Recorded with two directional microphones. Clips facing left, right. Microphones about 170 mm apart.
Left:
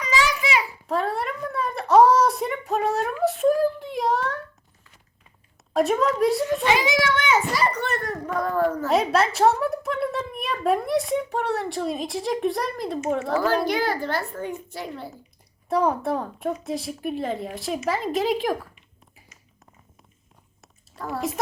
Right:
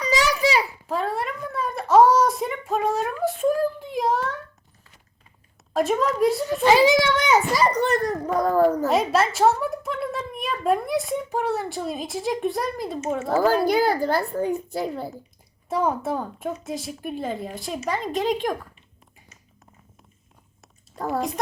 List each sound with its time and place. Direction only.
0.0 s a sound: 40° right (ahead or behind)
0.9 s a sound: centre (ahead or behind)
5.7 s a woman's voice: centre (ahead or behind)
6.7 s a child's voice: 35° right (ahead or behind)
8.9 s a woman's voice: centre (ahead or behind)
13.3 s a child's voice: 40° right (ahead or behind)
15.7 s a woman's voice: centre (ahead or behind)
21.0 s speech: 40° right (ahead or behind)